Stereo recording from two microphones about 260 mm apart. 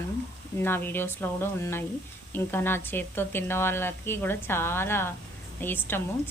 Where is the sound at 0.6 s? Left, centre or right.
Centre.